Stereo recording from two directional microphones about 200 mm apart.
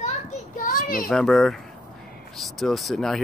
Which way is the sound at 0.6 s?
45° left (ahead or behind).